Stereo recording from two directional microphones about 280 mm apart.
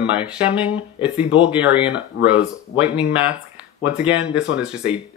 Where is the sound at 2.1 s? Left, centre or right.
Left.